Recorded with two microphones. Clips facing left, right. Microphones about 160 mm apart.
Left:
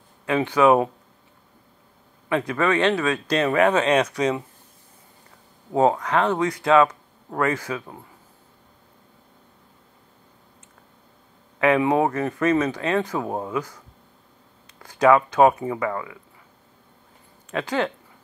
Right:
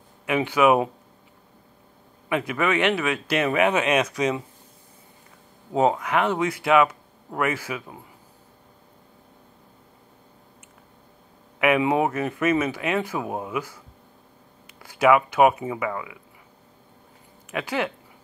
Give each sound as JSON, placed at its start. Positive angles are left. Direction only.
{"t": 0.3, "sound": "speech", "side_deg": -15}
{"t": 2.2, "sound": "speech", "side_deg": -15}
{"t": 5.8, "sound": "speech", "side_deg": -15}
{"t": 11.6, "sound": "speech", "side_deg": -15}
{"t": 14.8, "sound": "speech", "side_deg": -10}
{"t": 17.5, "sound": "speech", "side_deg": -15}